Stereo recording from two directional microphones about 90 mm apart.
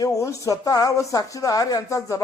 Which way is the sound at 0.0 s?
40° left (ahead or behind).